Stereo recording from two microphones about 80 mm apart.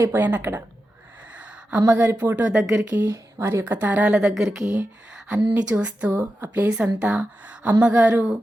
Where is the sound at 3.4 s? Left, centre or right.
Right.